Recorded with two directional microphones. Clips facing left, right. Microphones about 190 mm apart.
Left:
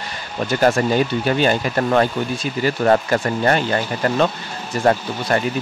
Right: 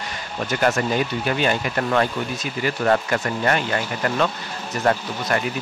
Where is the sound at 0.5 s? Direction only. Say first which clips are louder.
Left 4 dB; 30° left (ahead or behind).